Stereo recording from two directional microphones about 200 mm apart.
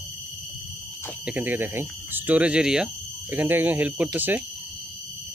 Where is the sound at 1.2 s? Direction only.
10° right (ahead or behind).